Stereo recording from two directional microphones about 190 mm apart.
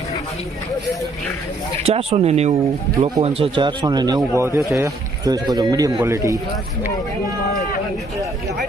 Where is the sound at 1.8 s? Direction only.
30° right (ahead or behind); by 6.4 s 15° right (ahead or behind).